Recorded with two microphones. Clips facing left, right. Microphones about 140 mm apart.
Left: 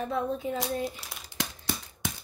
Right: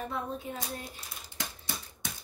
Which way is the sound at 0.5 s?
90° left.